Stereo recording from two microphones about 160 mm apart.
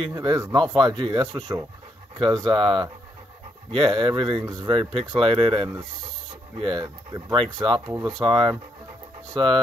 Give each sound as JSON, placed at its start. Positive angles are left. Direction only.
{"t": 0.0, "sound": "speech", "side_deg": -25}